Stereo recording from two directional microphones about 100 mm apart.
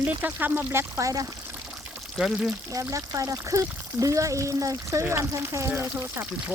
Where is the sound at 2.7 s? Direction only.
35° right (ahead or behind).